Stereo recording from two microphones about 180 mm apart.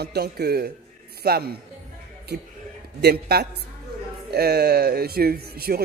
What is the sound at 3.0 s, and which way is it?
Speech, 60° right (ahead or behind).